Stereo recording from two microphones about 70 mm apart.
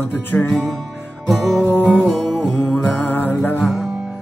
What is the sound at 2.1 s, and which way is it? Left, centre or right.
Music, centre.